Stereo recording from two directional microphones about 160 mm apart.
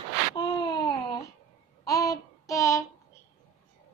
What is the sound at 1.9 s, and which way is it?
Child singing, 20° left (ahead or behind).